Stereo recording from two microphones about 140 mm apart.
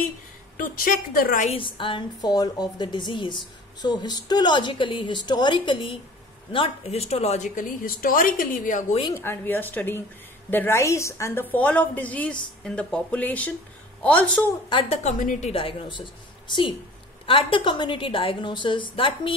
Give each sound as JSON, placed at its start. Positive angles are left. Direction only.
{"t": 0.6, "sound": "a woman's voice", "side_deg": 90}
{"t": 1.1, "sound": "a woman's voice", "side_deg": 80}
{"t": 1.5, "sound": "a woman's voice", "side_deg": 35}
{"t": 7.4, "sound": "a woman's voice", "side_deg": 80}
{"t": 9.1, "sound": "a woman's voice", "side_deg": 15}
{"t": 11.5, "sound": "a woman's voice", "side_deg": 10}
{"t": 14.7, "sound": "a woman's voice", "side_deg": 35}
{"t": 15.0, "sound": "a woman's voice", "side_deg": 60}
{"t": 15.5, "sound": "a woman's voice", "side_deg": 40}